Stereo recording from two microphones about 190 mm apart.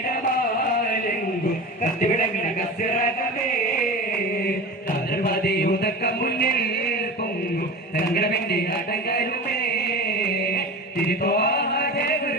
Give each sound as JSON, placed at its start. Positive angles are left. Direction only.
{"t": 5.1, "sound": "music", "side_deg": 55}
{"t": 8.1, "sound": "a man's voice", "side_deg": 55}
{"t": 9.0, "sound": "music", "side_deg": 55}
{"t": 11.0, "sound": "chant", "side_deg": 55}